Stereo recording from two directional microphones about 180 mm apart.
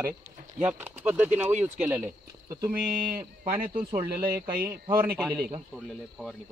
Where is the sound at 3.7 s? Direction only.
55° right (ahead or behind).